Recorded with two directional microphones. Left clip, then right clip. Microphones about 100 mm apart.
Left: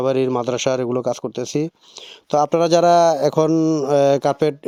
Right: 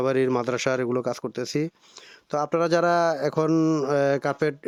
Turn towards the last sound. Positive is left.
turn(degrees=30)  # may be behind; listen again after turning